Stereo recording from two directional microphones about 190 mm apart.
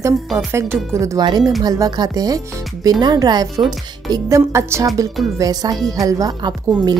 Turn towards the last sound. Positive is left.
turn(degrees=-20)  # may be behind; listen again after turning